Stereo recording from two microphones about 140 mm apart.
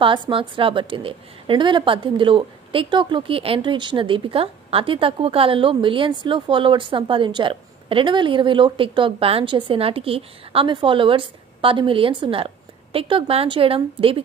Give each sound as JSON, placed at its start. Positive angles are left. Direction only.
{"t": 0.0, "sound": "a woman's voice", "side_deg": -35}